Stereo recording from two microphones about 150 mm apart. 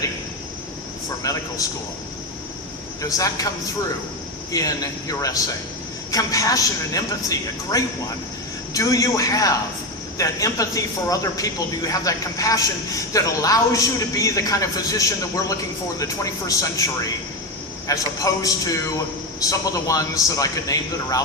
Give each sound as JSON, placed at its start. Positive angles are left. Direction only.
{"t": 1.2, "sound": "a man's voice", "side_deg": 20}
{"t": 3.0, "sound": "a man's voice", "side_deg": 20}
{"t": 4.5, "sound": "a man's voice", "side_deg": 25}